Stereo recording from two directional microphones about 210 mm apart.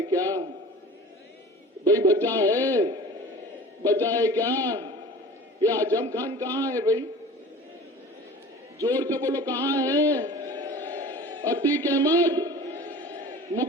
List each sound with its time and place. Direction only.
0.1 s a sound: 15° right (ahead or behind)
1.8 s a man's voice: 15° right (ahead or behind)
8.8 s a man's voice: 15° right (ahead or behind)
13.0 s battle cry: 20° right (ahead or behind)